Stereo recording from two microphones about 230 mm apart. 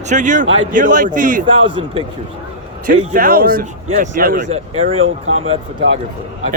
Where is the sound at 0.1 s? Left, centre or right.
Right.